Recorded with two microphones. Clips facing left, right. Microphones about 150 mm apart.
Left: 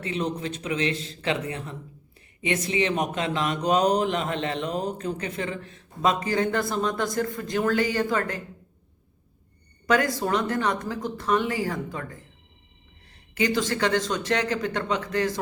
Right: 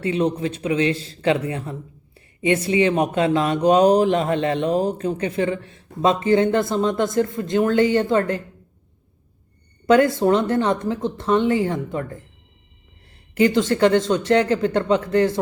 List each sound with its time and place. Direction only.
0.2 s speech: 30° right (ahead or behind)
9.8 s speech: 25° right (ahead or behind)
13.4 s speech: 25° right (ahead or behind)